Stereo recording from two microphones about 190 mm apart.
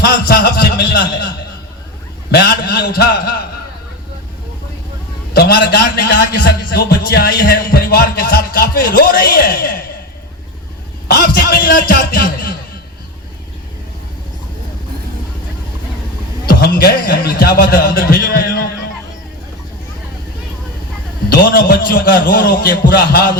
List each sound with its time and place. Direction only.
0.0 s a man's voice: 55° left (ahead or behind)
2.3 s a man's voice: 55° left (ahead or behind)
5.3 s a man's voice: 55° left (ahead or behind)
11.1 s a man's voice: 50° left (ahead or behind)
16.5 s a man's voice: 55° left (ahead or behind)
21.2 s a man's voice: 50° left (ahead or behind)